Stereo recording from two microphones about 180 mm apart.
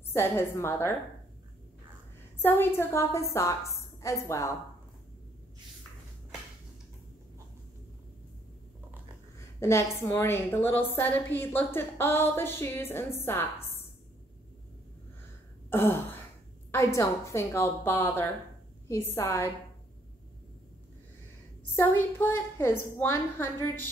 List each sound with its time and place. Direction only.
0.0 s a woman's voice: 15° left (ahead or behind)
2.4 s a woman's voice: 15° left (ahead or behind)
9.6 s a woman's voice: 15° left (ahead or behind)
15.7 s a woman's voice: 10° left (ahead or behind)
21.7 s a woman's voice: 10° left (ahead or behind)